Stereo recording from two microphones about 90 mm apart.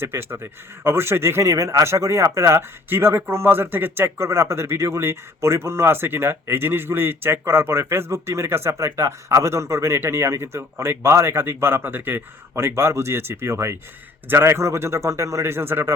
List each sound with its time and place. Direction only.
0.0 s a man's voice: 25° right (ahead or behind)